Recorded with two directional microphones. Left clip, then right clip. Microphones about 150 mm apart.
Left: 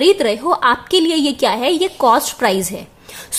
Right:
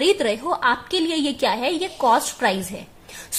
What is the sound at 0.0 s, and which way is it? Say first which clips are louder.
A woman's voice: left 6 dB; 20° left (ahead or behind).